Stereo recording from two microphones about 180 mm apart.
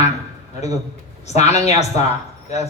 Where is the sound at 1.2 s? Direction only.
40° left (ahead or behind).